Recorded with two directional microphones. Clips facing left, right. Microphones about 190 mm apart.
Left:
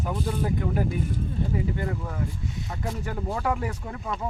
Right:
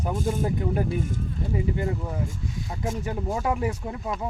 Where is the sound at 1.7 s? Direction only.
20° right (ahead or behind).